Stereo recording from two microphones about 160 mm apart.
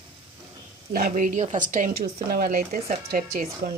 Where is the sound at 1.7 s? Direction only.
65° right (ahead or behind).